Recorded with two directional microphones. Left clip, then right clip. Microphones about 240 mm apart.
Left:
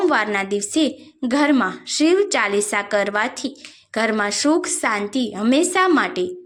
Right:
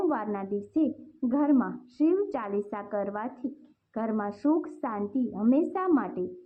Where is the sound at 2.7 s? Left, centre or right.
Left.